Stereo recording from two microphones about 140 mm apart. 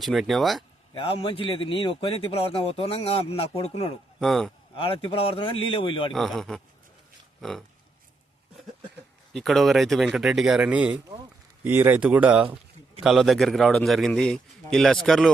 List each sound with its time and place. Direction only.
0.0 s a man's voice: centre (ahead or behind)
0.9 s a man's voice: 40° left (ahead or behind)
4.2 s a man's voice: centre (ahead or behind)
4.7 s a man's voice: 40° left (ahead or behind)
6.1 s a man's voice: centre (ahead or behind)
9.3 s a man's voice: centre (ahead or behind)